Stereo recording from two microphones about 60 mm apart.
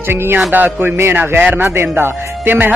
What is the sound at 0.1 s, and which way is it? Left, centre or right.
A man's voice, right.